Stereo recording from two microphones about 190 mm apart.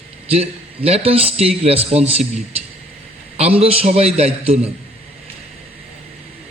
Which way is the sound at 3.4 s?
30° right (ahead or behind).